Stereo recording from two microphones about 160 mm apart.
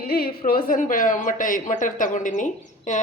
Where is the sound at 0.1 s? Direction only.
70° left (ahead or behind).